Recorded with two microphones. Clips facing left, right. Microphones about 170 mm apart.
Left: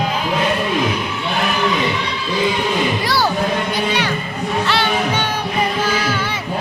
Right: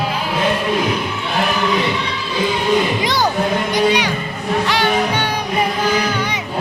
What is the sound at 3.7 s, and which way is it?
Music, 15° right (ahead or behind).